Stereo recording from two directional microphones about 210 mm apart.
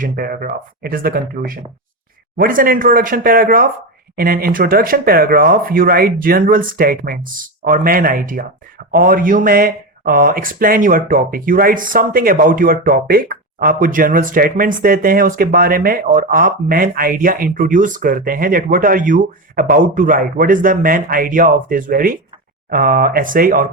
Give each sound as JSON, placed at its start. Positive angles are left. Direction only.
{"t": 0.0, "sound": "speech", "side_deg": -40}